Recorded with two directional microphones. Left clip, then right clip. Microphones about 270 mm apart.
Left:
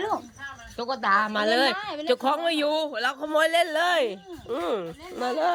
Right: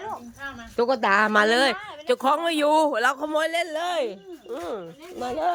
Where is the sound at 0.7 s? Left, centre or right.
Centre.